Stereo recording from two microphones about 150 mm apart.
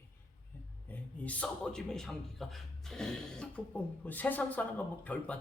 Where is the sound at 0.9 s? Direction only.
10° left (ahead or behind).